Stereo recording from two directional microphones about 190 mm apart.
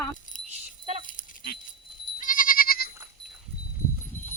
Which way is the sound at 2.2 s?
45° left (ahead or behind).